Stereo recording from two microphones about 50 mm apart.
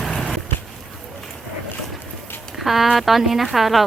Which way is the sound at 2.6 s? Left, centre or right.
Centre.